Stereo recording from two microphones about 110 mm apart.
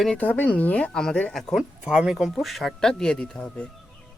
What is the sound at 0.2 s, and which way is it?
Speech, 15° left (ahead or behind).